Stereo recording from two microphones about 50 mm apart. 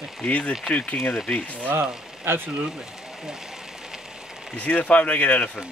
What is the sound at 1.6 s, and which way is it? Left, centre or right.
Speech, right.